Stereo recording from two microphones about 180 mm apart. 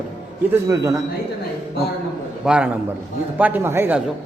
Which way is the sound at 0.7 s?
20° right (ahead or behind).